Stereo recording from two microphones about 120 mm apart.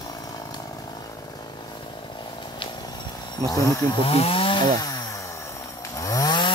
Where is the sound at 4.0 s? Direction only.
50° left (ahead or behind).